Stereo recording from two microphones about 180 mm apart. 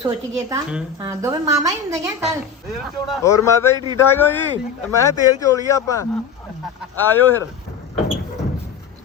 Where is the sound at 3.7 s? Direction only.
25° right (ahead or behind).